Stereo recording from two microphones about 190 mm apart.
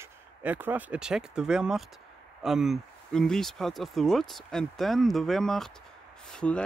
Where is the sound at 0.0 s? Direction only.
10° right (ahead or behind).